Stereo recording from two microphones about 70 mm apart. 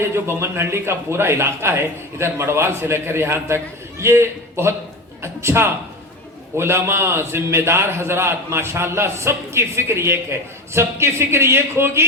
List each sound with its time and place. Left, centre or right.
0.0 s a man's voice: right